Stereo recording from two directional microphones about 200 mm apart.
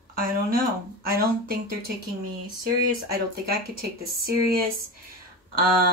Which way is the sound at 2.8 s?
50° right (ahead or behind).